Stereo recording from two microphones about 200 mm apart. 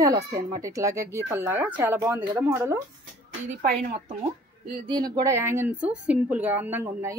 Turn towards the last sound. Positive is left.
turn(degrees=-10)  # may be behind; listen again after turning